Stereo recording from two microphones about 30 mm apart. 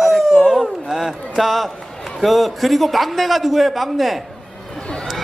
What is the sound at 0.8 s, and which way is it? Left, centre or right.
Speech, centre.